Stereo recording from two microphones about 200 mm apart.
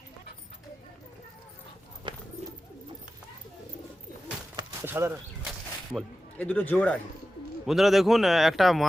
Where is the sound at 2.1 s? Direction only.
25° right (ahead or behind).